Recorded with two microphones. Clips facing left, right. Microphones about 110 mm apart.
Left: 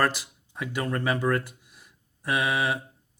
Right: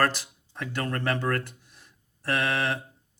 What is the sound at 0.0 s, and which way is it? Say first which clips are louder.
Speech: even; 10° left (ahead or behind).